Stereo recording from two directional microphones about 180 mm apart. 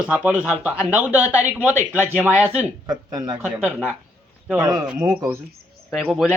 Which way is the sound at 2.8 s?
20° right (ahead or behind).